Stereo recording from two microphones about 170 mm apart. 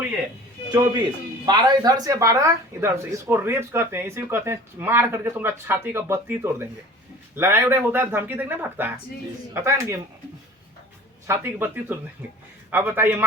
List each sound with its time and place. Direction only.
1.5 s speech: 25° right (ahead or behind)
11.3 s speech: 10° right (ahead or behind)